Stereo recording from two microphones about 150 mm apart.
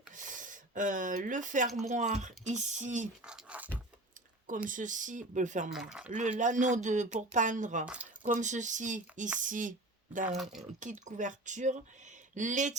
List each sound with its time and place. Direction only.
0.2 s speech: 60° right (ahead or behind)
3.2 s a sound: 5° right (ahead or behind)
4.7 s speech: 60° right (ahead or behind)
5.7 s speech: 5° right (ahead or behind)
6.1 s speech: 55° right (ahead or behind)
10.3 s speech: centre (ahead or behind)
11.0 s speech: 55° right (ahead or behind)